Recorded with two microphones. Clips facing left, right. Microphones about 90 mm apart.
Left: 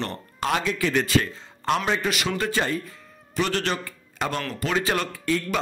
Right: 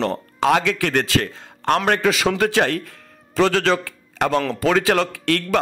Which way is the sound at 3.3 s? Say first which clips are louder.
Right 8 dB; 90° right.